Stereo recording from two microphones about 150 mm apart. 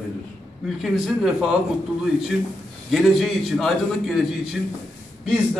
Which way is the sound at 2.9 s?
Centre (ahead or behind).